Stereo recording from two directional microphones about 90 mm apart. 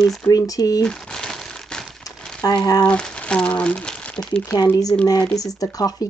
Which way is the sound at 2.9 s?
10° left (ahead or behind).